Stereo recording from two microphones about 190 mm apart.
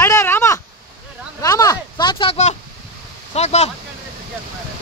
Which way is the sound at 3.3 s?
35° left (ahead or behind).